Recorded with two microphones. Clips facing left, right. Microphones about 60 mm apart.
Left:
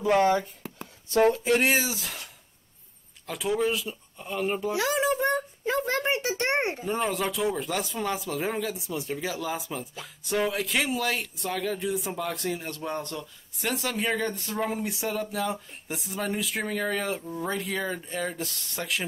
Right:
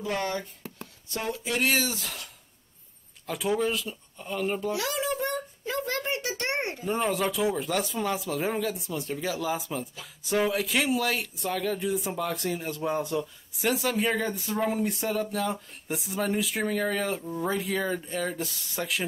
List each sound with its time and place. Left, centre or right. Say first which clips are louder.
0.0 s a child's voice: left 8 dB; left
1.2 s speech: left 9 dB; left
1.6 s a child's voice: left 2 dB; centre
1.9 s speech: even; centre
3.3 s speech: even; centre
4.7 s a sound: left 4 dB; left
5.9 s a child's voice: left 4 dB; left
6.9 s speech: right 5 dB; centre